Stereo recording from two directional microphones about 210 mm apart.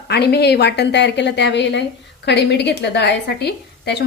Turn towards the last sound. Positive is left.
turn(degrees=50)  # may be behind; listen again after turning